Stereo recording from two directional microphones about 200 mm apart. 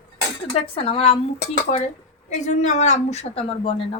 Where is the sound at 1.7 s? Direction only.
40° left (ahead or behind).